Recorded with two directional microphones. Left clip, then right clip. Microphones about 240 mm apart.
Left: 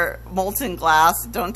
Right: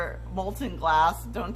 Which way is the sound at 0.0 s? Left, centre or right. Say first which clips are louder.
Left 9 dB; left.